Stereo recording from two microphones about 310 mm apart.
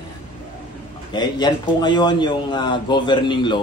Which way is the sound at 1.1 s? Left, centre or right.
Centre.